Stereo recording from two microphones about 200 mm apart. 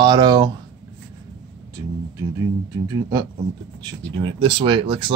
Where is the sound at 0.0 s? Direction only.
20° right (ahead or behind).